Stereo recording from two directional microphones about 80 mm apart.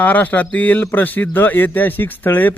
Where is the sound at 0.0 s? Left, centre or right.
Centre.